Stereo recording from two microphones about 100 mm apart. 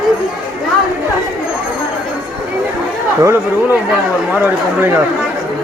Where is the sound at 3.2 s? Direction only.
30° right (ahead or behind).